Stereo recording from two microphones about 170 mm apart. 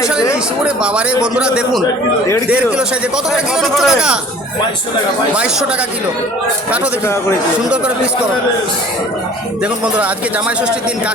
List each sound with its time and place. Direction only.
0.0 s a man's voice: 5° right (ahead or behind)
5.3 s speech: 5° right (ahead or behind)
7.0 s speech: 15° left (ahead or behind)
9.8 s speech: 5° right (ahead or behind)